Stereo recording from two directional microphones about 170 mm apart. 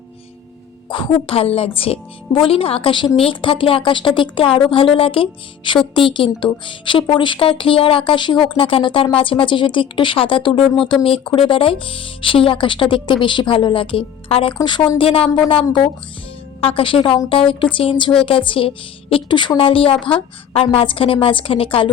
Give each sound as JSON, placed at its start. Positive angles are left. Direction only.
{"t": 0.9, "sound": "a woman's voice", "side_deg": 30}